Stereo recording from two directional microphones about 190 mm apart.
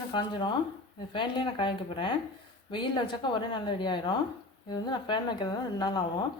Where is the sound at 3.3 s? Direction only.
25° left (ahead or behind).